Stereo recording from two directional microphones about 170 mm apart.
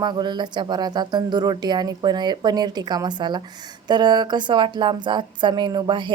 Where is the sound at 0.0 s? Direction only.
25° right (ahead or behind).